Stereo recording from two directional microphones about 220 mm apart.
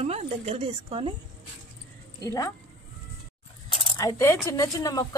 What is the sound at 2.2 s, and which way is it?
Speech, 15° left (ahead or behind).